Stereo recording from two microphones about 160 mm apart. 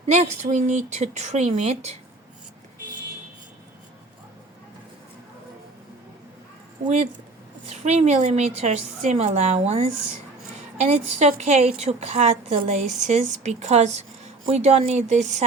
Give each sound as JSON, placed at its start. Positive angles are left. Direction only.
{"t": 0.0, "sound": "a woman's voice", "side_deg": -40}
{"t": 6.8, "sound": "a woman's voice", "side_deg": -45}